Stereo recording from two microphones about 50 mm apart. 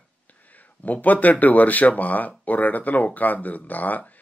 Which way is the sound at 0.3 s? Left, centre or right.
Left.